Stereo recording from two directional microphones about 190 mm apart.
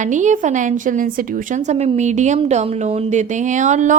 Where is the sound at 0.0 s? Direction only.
40° right (ahead or behind).